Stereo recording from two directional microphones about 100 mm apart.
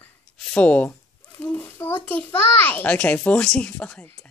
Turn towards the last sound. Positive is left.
turn(degrees=10)  # may be behind; listen again after turning